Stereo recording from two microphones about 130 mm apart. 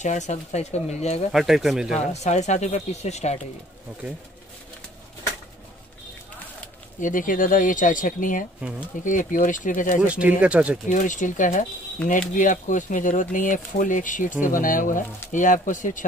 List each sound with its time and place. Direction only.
0.0 s speech: 65° left (ahead or behind)
1.3 s speech: centre (ahead or behind)
2.0 s speech: 60° left (ahead or behind)
7.0 s speech: 90° left
10.0 s speech: 10° right (ahead or behind)
10.9 s speech: 75° left (ahead or behind)